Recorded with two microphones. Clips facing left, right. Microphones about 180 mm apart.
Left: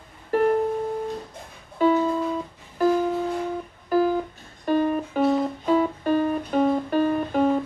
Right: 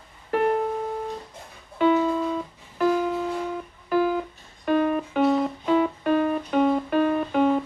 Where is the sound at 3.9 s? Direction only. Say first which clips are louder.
Left 1 dB; 40° left (ahead or behind).